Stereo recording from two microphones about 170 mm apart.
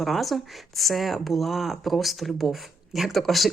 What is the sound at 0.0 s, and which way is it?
Speech, centre (ahead or behind).